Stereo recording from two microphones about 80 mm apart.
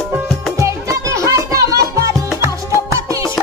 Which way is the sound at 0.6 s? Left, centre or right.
Right.